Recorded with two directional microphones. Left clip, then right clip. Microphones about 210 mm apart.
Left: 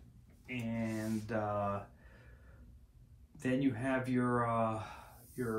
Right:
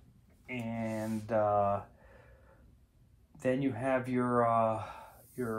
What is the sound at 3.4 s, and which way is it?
Speech, 30° right (ahead or behind).